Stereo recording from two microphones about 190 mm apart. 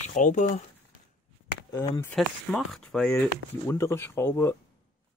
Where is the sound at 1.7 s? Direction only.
15° left (ahead or behind).